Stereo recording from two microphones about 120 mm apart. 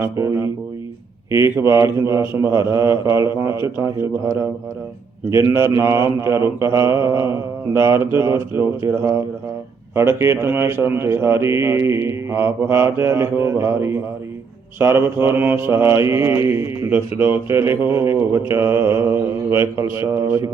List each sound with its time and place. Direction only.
0.0 s speech: 25° right (ahead or behind)
1.5 s speech: 25° right (ahead or behind)
9.9 s speech: 20° right (ahead or behind)